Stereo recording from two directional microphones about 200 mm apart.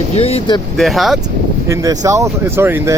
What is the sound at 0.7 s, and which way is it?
Speech, centre (ahead or behind).